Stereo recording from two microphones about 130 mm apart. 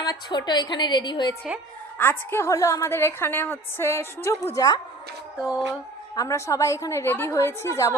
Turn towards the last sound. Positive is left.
turn(degrees=20)  # may be behind; listen again after turning